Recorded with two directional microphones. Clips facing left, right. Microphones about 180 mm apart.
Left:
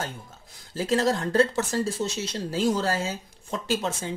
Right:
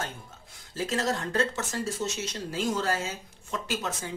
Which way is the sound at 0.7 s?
30° left (ahead or behind).